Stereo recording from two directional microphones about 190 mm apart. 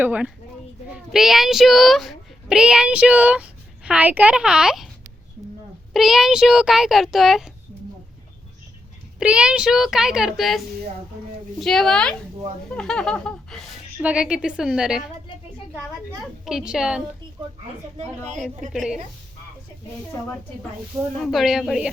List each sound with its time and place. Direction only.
0.0 s a child's voice: 5° right (ahead or behind)
5.9 s a child's voice: centre (ahead or behind)
9.1 s a child's voice: 5° right (ahead or behind)
11.6 s a child's voice: 5° left (ahead or behind)
16.5 s a child's voice: 5° right (ahead or behind)
17.9 s a woman's voice: 35° right (ahead or behind)
18.7 s a child's voice: 5° right (ahead or behind)
21.2 s a child's voice: centre (ahead or behind)